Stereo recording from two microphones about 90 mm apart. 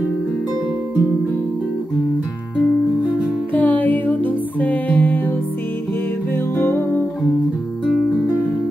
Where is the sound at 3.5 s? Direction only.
15° left (ahead or behind).